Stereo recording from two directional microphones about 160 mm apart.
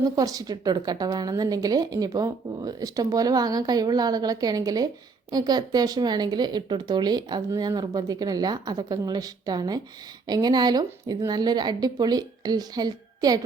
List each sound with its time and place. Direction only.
0.0 s speech: 20° right (ahead or behind)